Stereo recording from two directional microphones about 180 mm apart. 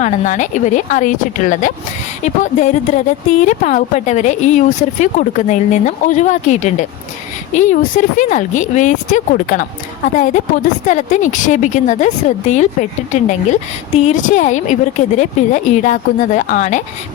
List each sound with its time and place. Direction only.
0.0 s speech: 45° left (ahead or behind)